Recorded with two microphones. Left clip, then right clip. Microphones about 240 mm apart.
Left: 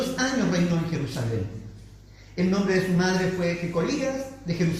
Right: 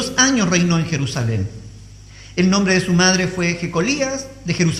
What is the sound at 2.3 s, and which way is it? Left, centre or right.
A man's voice, right.